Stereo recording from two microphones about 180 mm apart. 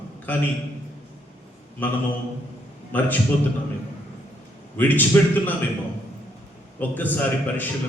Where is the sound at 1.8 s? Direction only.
10° left (ahead or behind).